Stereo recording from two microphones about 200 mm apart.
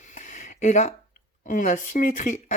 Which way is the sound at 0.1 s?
40° left (ahead or behind).